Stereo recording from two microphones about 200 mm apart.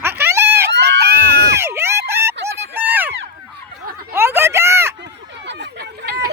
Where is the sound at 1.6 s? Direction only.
10° right (ahead or behind).